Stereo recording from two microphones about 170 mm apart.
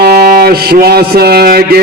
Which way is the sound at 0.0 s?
65° right (ahead or behind).